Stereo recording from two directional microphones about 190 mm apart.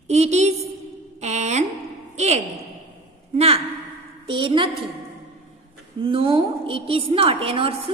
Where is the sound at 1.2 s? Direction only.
35° right (ahead or behind).